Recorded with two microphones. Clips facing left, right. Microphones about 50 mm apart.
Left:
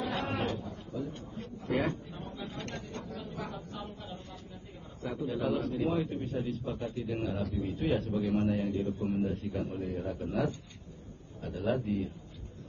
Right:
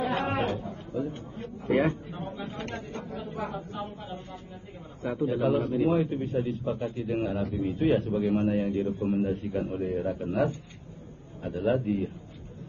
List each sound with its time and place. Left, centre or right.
0.0 s a man's voice: right